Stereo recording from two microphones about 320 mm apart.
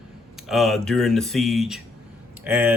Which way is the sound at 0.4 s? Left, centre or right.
Centre.